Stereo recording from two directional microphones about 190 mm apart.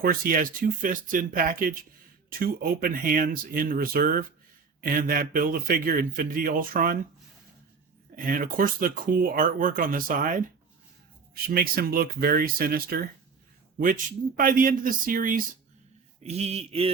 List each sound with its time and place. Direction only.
0.0 s speech: 50° right (ahead or behind)
8.1 s speech: 45° right (ahead or behind)
11.4 s speech: 50° right (ahead or behind)
16.2 s a sound: 35° right (ahead or behind)